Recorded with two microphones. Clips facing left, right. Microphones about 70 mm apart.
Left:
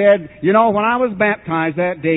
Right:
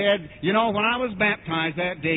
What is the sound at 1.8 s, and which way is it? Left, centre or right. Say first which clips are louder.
Mantra: left 9 dB; left.